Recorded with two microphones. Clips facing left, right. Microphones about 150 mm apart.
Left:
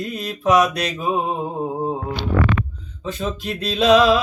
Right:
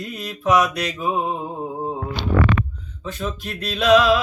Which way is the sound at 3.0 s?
25° left (ahead or behind).